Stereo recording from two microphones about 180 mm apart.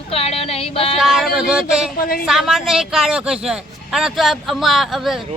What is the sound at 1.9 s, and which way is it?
Speech, 55° left (ahead or behind).